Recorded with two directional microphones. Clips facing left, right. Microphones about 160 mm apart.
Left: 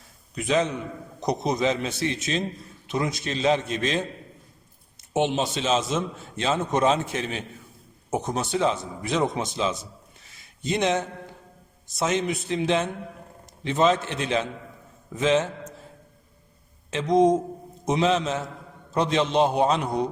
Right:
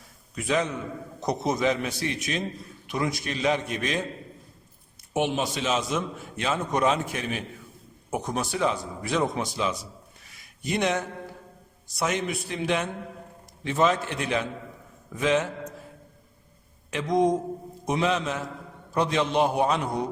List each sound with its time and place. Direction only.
0.3 s a man's voice: 20° left (ahead or behind)
5.1 s a man's voice: 25° left (ahead or behind)
10.3 s a sound: 25° left (ahead or behind)
11.9 s a man's voice: 25° left (ahead or behind)
16.9 s a man's voice: 20° left (ahead or behind)